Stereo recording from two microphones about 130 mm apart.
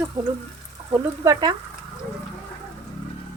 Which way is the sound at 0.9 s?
25° right (ahead or behind).